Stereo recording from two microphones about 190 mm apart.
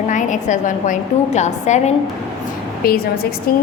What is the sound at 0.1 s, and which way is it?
A woman's voice, 40° left (ahead or behind).